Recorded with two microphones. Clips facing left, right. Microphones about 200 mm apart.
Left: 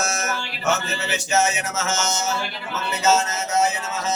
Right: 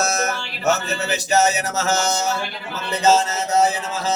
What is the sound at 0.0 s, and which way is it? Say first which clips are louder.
Music: right 4 dB; 35° right (ahead or behind).